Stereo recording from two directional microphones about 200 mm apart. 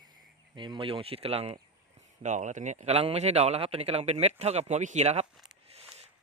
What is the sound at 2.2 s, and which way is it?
Speech, 35° right (ahead or behind).